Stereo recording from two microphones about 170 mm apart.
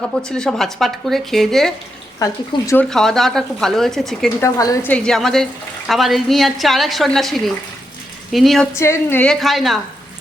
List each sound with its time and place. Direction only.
0.2 s speech: 5° left (ahead or behind)
2.1 s speech: 20° left (ahead or behind)
2.9 s speech: centre (ahead or behind)
4.4 s speech: 15° left (ahead or behind); by 8.6 s centre (ahead or behind)
8.7 s speech: 15° left (ahead or behind); by 9.8 s centre (ahead or behind)